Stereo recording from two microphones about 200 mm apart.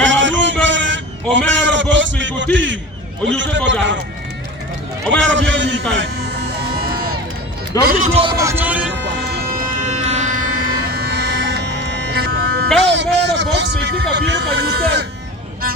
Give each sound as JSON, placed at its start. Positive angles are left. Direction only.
{"t": 0.0, "sound": "music", "side_deg": -65}
{"t": 1.3, "sound": "a sound", "side_deg": -65}
{"t": 3.2, "sound": "a man's voice", "side_deg": -65}
{"t": 5.1, "sound": "speech", "side_deg": -65}
{"t": 5.9, "sound": "a sound", "side_deg": -60}
{"t": 7.8, "sound": "a man's voice", "side_deg": -45}
{"t": 8.2, "sound": "speech", "side_deg": -15}
{"t": 9.6, "sound": "music", "side_deg": -35}
{"t": 10.8, "sound": "a sound", "side_deg": -55}
{"t": 12.8, "sound": "speech", "side_deg": -60}